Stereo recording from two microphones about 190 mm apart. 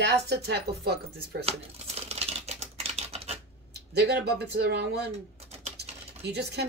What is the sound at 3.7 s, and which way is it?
Speech, 60° right (ahead or behind).